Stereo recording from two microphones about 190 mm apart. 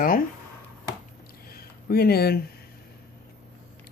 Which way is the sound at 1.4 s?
55° left (ahead or behind).